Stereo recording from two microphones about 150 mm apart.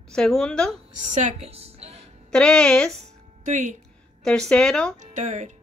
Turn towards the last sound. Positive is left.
turn(degrees=-50)  # may be behind; listen again after turning